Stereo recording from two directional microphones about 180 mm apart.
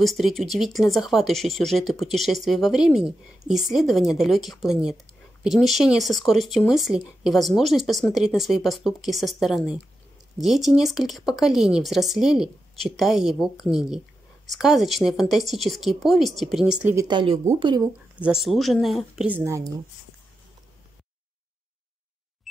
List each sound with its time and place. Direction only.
0.0 s speech: centre (ahead or behind)
16.9 s speech: 20° right (ahead or behind)
18.2 s speech: centre (ahead or behind)